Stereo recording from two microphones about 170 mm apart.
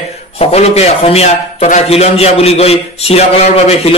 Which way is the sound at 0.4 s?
35° left (ahead or behind).